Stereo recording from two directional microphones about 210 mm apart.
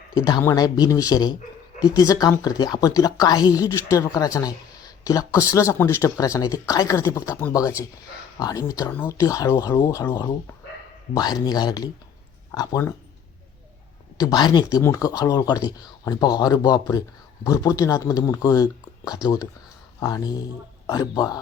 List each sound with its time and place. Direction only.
0.1 s speech: 20° left (ahead or behind)
14.2 s speech: 20° left (ahead or behind)